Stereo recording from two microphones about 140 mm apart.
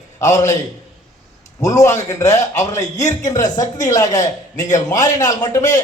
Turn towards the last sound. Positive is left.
turn(degrees=25)  # may be behind; listen again after turning